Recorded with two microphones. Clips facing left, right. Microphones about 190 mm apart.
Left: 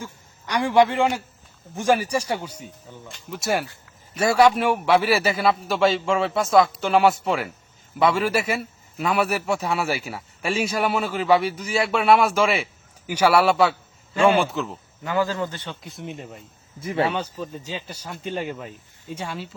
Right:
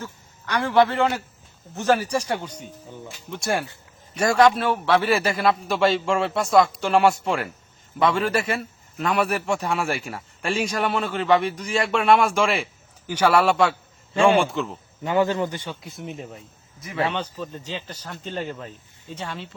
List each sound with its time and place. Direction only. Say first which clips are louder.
0.0 s a man's voice: even; 15° left (ahead or behind)
15.0 s speech: right 3 dB; 20° right (ahead or behind); by 16.4 s centre (ahead or behind)
16.8 s speech: left 3 dB; 30° left (ahead or behind)
17.1 s speech: left 1 dB; 10° left (ahead or behind)